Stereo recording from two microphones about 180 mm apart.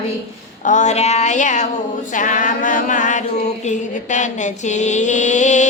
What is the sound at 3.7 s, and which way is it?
Mantra, 40° left (ahead or behind).